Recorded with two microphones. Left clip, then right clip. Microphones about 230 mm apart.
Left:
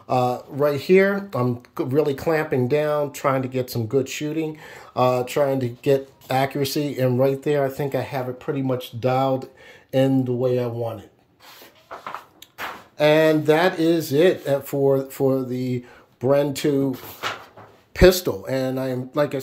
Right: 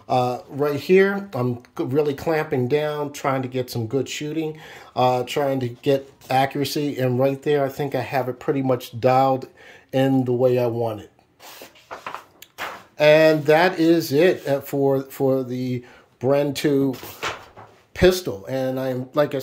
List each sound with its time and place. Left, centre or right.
0.1 s speech: centre
8.3 s speech: centre
10.4 s speech: centre
12.9 s speech: centre
17.9 s speech: centre